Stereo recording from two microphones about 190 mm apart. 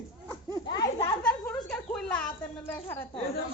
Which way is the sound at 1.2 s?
5° left (ahead or behind).